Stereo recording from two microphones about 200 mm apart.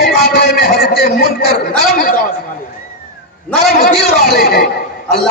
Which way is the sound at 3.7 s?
55° left (ahead or behind).